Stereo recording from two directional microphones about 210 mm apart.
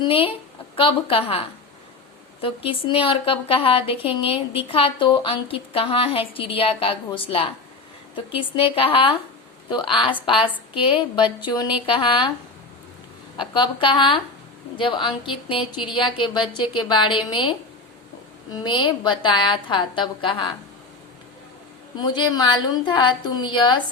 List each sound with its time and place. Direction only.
0.0 s a woman's voice: 25° left (ahead or behind)
13.3 s a woman's voice: 20° left (ahead or behind)
18.5 s a woman's voice: 20° left (ahead or behind)
21.9 s a woman's voice: 20° left (ahead or behind)